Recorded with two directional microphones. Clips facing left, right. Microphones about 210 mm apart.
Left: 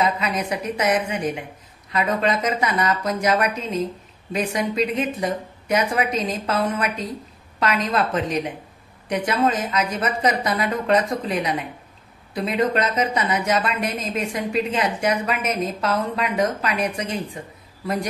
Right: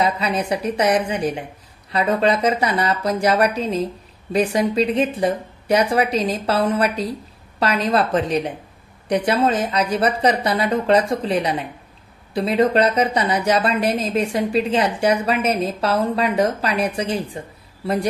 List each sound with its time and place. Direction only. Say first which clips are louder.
0.0 s a woman's voice: right 2 dB; 30° right (ahead or behind)